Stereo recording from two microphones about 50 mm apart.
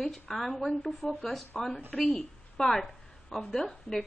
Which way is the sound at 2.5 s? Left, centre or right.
Centre.